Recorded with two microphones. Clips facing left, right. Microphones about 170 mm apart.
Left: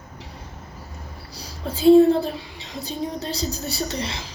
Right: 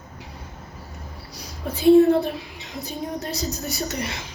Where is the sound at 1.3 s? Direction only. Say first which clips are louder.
Even; 30° left (ahead or behind).